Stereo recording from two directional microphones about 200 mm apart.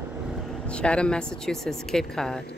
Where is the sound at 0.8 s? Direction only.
5° left (ahead or behind).